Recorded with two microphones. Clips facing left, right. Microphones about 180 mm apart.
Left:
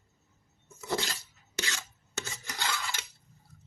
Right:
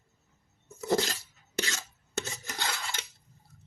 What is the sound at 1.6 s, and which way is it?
Filing, 40° right (ahead or behind).